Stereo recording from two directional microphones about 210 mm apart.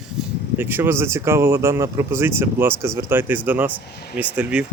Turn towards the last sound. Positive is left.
turn(degrees=-5)  # may be behind; listen again after turning